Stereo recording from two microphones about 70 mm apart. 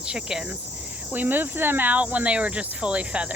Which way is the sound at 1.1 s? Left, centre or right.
Right.